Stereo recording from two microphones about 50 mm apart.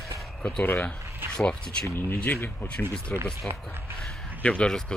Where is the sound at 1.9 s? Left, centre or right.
Left.